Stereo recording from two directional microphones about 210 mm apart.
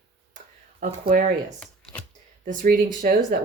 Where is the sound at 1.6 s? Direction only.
5° left (ahead or behind).